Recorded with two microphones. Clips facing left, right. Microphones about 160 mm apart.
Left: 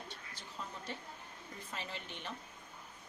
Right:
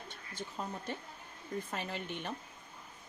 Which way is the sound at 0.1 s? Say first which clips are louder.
Right 6 dB; 50° right (ahead or behind).